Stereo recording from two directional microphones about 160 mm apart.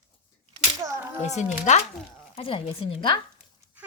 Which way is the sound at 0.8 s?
15° right (ahead or behind).